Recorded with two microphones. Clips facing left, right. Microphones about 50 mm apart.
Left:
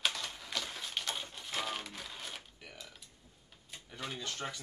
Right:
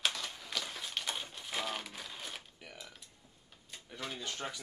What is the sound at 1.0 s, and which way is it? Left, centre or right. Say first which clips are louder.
Typewriter: even; centre.